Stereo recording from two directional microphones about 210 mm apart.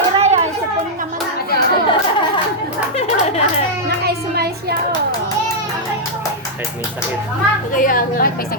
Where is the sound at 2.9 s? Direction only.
30° left (ahead or behind).